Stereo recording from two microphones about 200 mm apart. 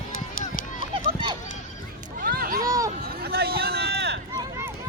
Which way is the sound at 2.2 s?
45° right (ahead or behind).